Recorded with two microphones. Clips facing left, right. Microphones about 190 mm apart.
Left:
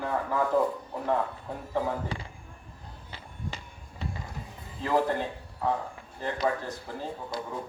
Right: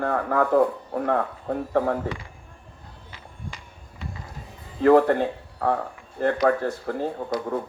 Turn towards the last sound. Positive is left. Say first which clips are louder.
# right 8 dB
turn(degrees=-60)  # may be behind; listen again after turning